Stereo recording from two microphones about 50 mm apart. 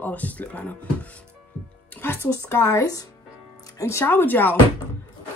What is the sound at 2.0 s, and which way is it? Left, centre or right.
Speech, left.